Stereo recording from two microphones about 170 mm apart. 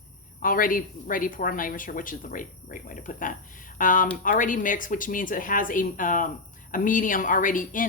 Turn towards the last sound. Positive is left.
turn(degrees=50)  # may be behind; listen again after turning